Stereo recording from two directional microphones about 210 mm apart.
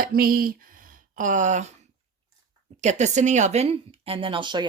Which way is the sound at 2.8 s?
35° right (ahead or behind).